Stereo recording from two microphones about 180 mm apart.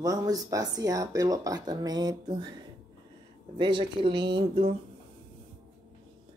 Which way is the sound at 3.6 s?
25° right (ahead or behind).